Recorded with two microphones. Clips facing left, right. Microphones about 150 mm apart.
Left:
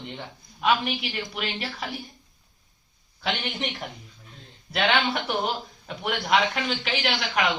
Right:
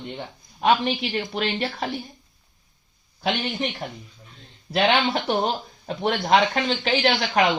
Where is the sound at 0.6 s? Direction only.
35° right (ahead or behind).